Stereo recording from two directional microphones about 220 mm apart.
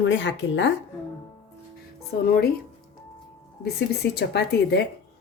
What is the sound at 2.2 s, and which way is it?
Speech, 45° left (ahead or behind).